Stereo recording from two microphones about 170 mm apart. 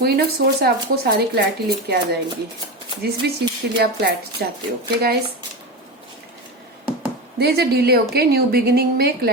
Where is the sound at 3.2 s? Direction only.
75° right (ahead or behind).